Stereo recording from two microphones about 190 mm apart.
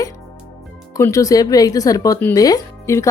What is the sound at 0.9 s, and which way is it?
Speech, 15° left (ahead or behind).